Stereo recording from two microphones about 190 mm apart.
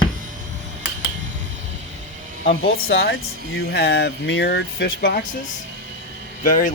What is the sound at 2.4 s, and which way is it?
Speech, 70° left (ahead or behind).